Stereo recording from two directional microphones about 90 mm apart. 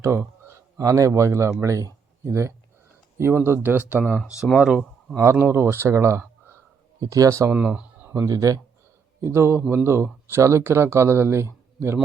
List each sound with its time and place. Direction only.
0.4 s a man's voice: 35° right (ahead or behind); by 4.0 s 20° right (ahead or behind)
4.0 s speech: 15° left (ahead or behind)
4.4 s speech: 5° right (ahead or behind)
5.1 s speech: 30° right (ahead or behind)
7.5 s a sound: 15° right (ahead or behind)
8.1 s speech: 35° right (ahead or behind)